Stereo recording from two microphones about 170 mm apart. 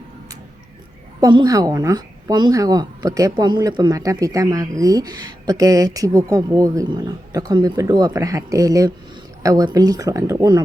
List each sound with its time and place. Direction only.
1.2 s a woman's voice: 25° right (ahead or behind)